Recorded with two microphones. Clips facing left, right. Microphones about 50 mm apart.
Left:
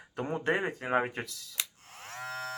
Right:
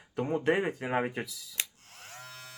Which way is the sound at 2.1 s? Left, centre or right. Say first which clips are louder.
Left 10 dB; left.